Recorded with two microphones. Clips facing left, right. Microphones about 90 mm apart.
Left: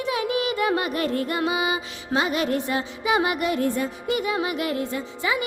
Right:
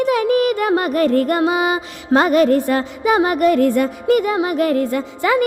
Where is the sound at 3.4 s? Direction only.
60° right (ahead or behind).